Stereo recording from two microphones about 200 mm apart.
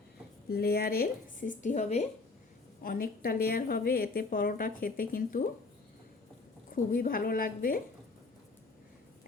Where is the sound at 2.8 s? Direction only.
45° left (ahead or behind).